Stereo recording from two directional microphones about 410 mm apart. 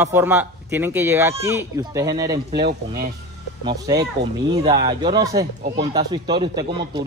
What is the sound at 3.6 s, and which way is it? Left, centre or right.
Speech, centre.